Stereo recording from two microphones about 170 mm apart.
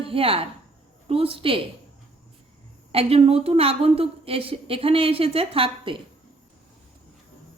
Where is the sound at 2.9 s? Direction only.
35° right (ahead or behind).